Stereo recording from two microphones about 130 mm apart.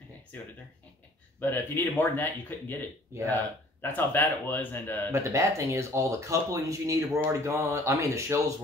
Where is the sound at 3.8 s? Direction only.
15° left (ahead or behind).